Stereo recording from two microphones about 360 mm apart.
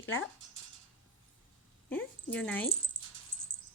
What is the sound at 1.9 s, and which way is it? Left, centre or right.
Speech, centre.